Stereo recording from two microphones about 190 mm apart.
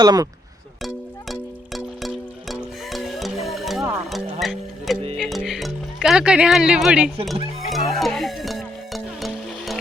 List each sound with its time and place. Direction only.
0.0 s speech: 20° right (ahead or behind)
1.3 s music: centre (ahead or behind)